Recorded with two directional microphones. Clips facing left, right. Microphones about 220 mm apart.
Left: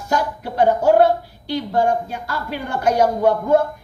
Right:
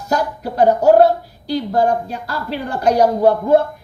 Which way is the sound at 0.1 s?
40° right (ahead or behind).